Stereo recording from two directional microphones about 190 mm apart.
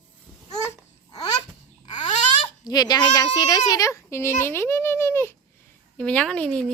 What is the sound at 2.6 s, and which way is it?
A child's voice, 20° left (ahead or behind).